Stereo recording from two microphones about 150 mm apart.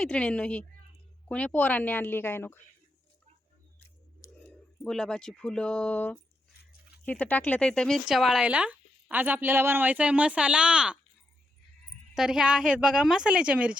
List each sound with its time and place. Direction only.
0.0 s speech: 5° left (ahead or behind)
4.2 s a sound: 20° left (ahead or behind)
4.8 s speech: 5° left (ahead or behind)
12.1 s speech: 5° right (ahead or behind)